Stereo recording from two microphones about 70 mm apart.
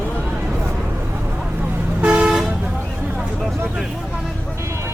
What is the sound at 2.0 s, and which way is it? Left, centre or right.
Toot, centre.